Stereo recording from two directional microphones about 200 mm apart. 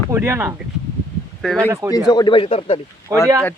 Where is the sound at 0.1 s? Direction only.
10° right (ahead or behind).